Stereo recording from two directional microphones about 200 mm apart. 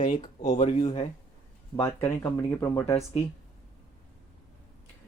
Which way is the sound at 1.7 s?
15° left (ahead or behind).